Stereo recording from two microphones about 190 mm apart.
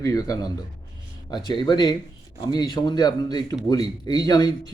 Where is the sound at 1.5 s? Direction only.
20° left (ahead or behind).